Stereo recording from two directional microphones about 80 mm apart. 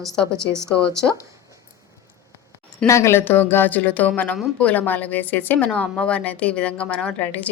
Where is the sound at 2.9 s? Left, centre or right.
Left.